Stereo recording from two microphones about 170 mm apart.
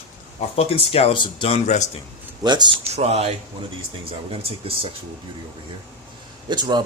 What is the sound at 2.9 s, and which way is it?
Speech, 40° right (ahead or behind).